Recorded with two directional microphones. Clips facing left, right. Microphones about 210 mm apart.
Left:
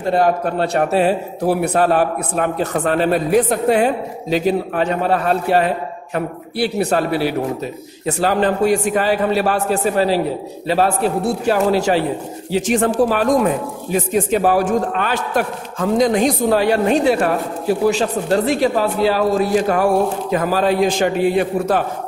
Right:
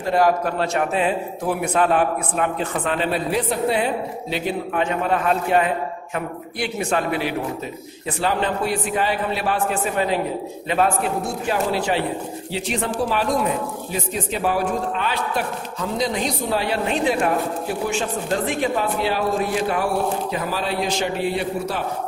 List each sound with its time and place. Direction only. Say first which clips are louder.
0.0 s a man's voice: left 2 dB; 30° left (ahead or behind); by 21.8 s 50° left (ahead or behind)